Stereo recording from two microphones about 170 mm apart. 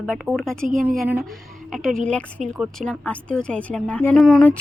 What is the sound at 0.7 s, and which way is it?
Speech, 50° right (ahead or behind).